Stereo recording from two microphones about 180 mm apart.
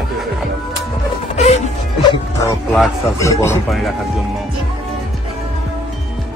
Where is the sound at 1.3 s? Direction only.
40° left (ahead or behind).